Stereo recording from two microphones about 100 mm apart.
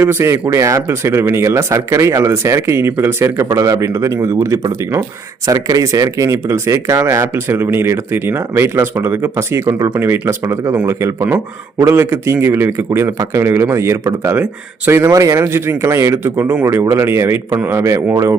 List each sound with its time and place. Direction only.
0.0 s speech: 25° right (ahead or behind)
9.9 s speech: 20° right (ahead or behind)